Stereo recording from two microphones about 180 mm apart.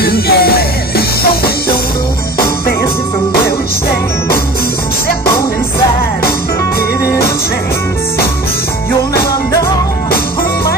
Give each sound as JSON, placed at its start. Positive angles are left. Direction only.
{"t": 0.0, "sound": "music", "side_deg": 60}